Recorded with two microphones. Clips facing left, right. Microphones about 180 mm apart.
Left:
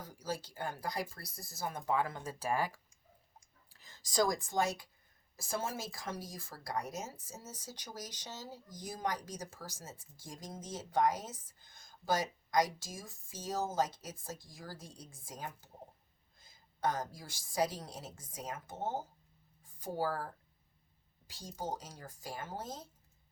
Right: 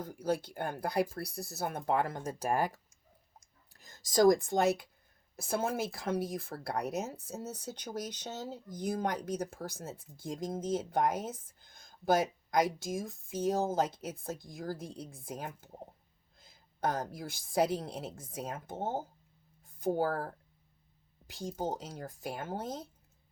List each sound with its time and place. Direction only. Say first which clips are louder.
0.0 s speech: right 8 dB; 60° right (ahead or behind)
2.2 s speech: right 4 dB; 50° right (ahead or behind)
21.3 s speech: right 5 dB; 55° right (ahead or behind)